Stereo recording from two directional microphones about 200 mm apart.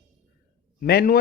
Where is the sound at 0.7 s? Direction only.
45° left (ahead or behind).